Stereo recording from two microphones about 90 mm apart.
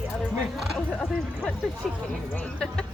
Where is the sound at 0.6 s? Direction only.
5° left (ahead or behind).